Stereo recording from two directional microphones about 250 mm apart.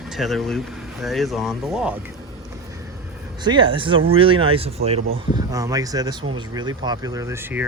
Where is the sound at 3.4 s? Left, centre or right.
Centre.